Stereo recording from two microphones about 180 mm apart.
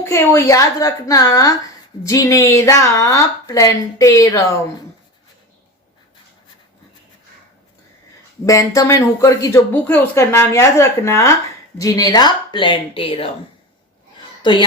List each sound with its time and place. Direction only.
0.0 s a woman's voice: 15° left (ahead or behind)
8.4 s a woman's voice: 20° left (ahead or behind)
14.4 s a woman's voice: 25° left (ahead or behind)